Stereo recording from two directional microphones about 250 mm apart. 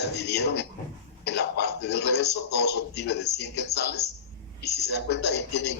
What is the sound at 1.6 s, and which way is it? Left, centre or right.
A man's voice, left.